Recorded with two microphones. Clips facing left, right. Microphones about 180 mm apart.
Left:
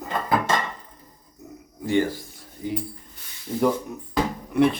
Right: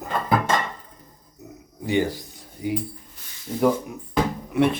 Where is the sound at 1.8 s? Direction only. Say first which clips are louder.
Even; 15° right (ahead or behind).